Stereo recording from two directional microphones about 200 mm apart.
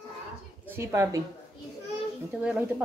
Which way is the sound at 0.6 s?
15° right (ahead or behind).